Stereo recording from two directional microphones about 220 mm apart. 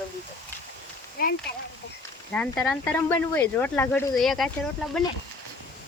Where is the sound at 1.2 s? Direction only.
45° left (ahead or behind).